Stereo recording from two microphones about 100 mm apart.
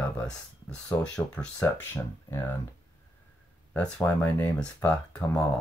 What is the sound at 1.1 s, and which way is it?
Speech, 10° left (ahead or behind).